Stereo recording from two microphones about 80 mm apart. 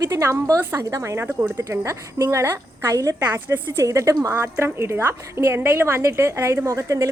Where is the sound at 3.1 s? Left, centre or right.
Right.